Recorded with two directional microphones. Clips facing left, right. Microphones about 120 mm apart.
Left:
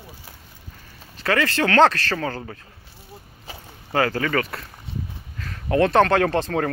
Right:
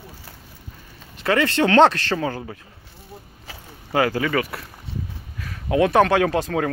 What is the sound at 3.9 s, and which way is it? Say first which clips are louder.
Speech: right 1 dB; 10° right (ahead or behind).